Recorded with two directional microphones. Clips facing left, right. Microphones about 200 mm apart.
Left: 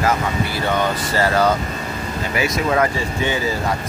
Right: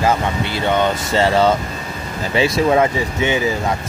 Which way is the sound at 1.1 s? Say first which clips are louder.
Right 3 dB; 25° right (ahead or behind).